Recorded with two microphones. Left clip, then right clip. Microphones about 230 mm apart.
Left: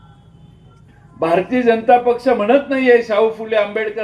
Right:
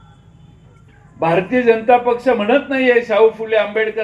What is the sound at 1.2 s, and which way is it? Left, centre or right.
Speech, left.